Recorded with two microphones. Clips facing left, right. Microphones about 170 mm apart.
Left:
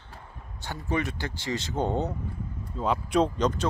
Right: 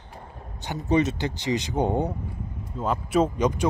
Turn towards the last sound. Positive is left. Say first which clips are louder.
# right 2 dB
turn(degrees=-10)  # may be behind; listen again after turning